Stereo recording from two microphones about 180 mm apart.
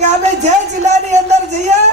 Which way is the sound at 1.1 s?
40° right (ahead or behind).